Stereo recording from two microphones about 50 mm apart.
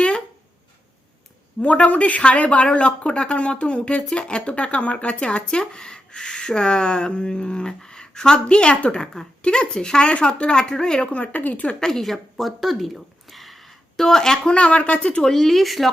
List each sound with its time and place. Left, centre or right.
1.6 s speech: left
11.1 s speech: left
11.8 s speech: centre
14.5 s speech: left
15.2 s speech: centre